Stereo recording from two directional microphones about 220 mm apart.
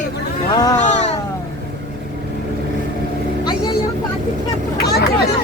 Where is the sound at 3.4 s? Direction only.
20° left (ahead or behind).